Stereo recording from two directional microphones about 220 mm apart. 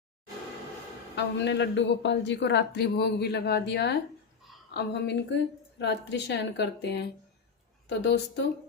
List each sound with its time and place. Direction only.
1.1 s a woman's voice: 50° left (ahead or behind)